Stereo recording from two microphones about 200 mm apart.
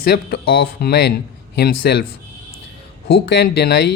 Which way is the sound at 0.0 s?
50° left (ahead or behind).